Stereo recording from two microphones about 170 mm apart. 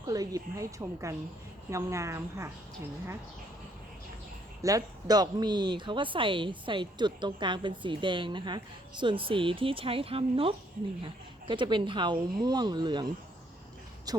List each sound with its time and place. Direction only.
0.0 s a woman's voice: 20° right (ahead or behind)
4.6 s speech: 20° right (ahead or behind)
14.1 s a woman's voice: 20° right (ahead or behind)